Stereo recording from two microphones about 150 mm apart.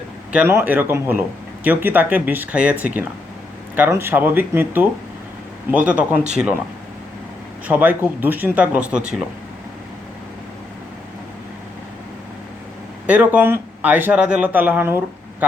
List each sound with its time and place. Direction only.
0.3 s speech: 15° right (ahead or behind)
7.7 s speech: 10° right (ahead or behind)
13.1 s speech: 10° right (ahead or behind)